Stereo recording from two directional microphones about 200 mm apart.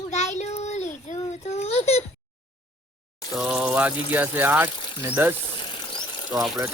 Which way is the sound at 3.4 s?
5° right (ahead or behind).